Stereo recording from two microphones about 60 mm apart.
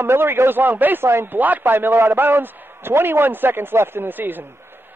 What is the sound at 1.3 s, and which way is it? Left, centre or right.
A man's voice, right.